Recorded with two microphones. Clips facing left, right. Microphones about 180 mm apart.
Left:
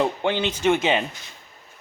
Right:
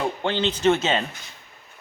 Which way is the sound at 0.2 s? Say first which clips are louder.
Even; 15° left (ahead or behind).